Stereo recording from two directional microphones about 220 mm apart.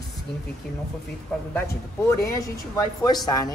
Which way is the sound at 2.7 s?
20° left (ahead or behind).